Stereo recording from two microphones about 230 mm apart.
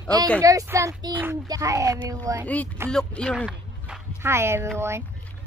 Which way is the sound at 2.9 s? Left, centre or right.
Centre.